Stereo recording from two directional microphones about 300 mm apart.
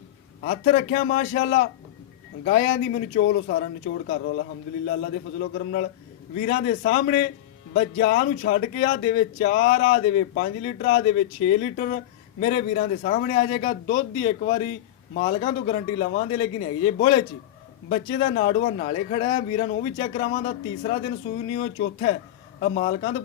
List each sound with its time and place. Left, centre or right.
0.4 s speech: left